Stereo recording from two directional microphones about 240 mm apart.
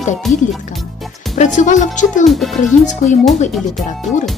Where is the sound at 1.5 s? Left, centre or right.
Left.